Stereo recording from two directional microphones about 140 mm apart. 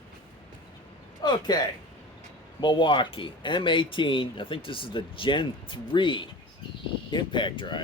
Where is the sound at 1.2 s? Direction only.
30° left (ahead or behind).